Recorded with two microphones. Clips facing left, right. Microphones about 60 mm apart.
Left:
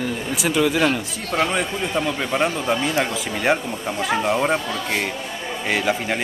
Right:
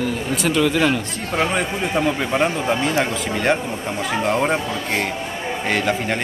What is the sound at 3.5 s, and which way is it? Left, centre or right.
Speech, centre.